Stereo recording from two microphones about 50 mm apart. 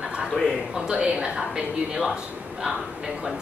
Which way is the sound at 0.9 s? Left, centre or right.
Centre.